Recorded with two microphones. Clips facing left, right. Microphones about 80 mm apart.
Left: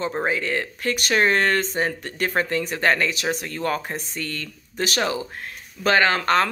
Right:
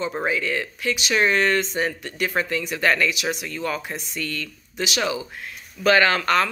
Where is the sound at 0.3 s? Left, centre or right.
Left.